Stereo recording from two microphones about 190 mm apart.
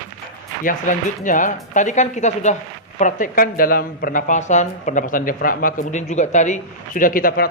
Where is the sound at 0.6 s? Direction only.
45° left (ahead or behind).